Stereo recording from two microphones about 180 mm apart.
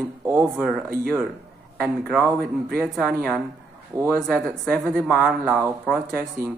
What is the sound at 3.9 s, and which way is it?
Speech, 20° right (ahead or behind).